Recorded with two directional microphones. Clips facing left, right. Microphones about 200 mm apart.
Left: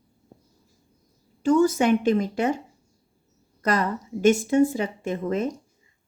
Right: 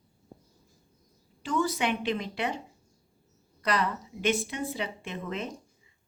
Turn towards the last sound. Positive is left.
turn(degrees=45)  # may be behind; listen again after turning